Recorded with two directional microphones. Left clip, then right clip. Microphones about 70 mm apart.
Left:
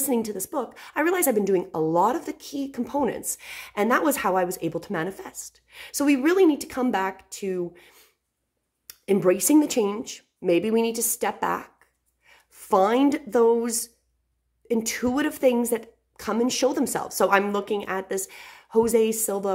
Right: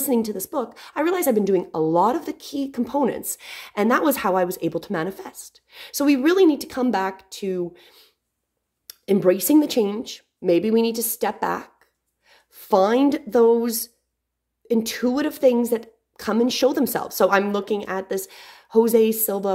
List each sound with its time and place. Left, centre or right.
0.0 s a woman's voice: centre
0.9 s a woman's voice: centre
1.5 s a woman's voice: centre
8.8 s a sound: centre
9.2 s a woman's voice: centre
11.2 s a woman's voice: centre
16.3 s a woman's voice: centre